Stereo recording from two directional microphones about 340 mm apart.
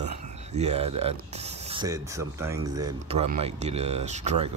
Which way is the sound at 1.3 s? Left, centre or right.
Centre.